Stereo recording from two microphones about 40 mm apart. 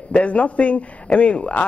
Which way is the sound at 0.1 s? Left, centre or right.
Left.